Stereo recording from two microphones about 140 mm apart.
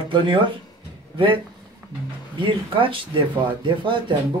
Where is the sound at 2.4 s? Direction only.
40° right (ahead or behind).